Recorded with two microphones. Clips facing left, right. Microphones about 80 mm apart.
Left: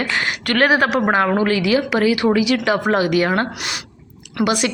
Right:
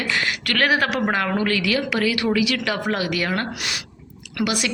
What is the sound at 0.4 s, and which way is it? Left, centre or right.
A woman's voice, left.